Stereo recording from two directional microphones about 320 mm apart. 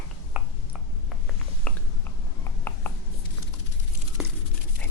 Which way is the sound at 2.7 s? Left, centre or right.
Centre.